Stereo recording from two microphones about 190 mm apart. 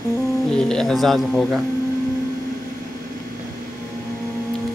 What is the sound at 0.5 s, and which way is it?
Speech, 5° left (ahead or behind).